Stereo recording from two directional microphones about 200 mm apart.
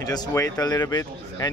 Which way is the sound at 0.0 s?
20° left (ahead or behind).